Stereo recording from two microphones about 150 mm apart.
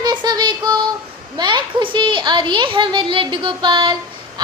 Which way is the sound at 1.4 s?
30° right (ahead or behind).